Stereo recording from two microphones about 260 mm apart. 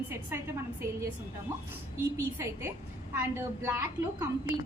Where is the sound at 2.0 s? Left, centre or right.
Centre.